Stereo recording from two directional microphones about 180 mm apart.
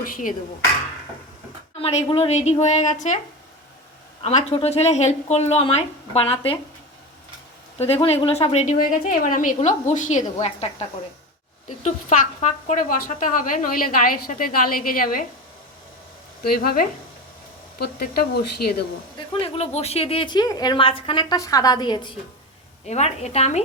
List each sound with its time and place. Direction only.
0.0 s speech: 50° left (ahead or behind)
1.8 s a woman's voice: 35° left (ahead or behind)
4.2 s a woman's voice: 40° left (ahead or behind)
7.8 s a woman's voice: 35° left (ahead or behind); by 15.2 s 50° left (ahead or behind)
16.4 s speech: 55° left (ahead or behind)
19.3 s speech: 30° left (ahead or behind)
22.9 s a woman's voice: 40° left (ahead or behind)